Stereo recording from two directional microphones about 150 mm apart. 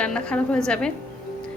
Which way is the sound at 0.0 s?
5° left (ahead or behind).